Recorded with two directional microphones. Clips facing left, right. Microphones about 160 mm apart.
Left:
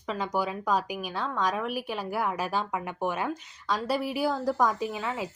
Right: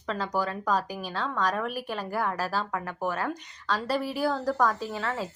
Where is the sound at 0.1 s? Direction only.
10° left (ahead or behind).